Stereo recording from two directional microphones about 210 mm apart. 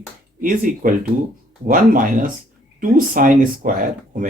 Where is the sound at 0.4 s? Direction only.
40° right (ahead or behind).